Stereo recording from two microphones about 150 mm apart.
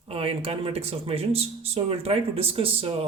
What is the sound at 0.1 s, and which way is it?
Speech, 40° right (ahead or behind).